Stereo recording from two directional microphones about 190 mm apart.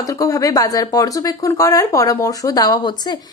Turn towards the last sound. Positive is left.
turn(degrees=20)  # may be behind; listen again after turning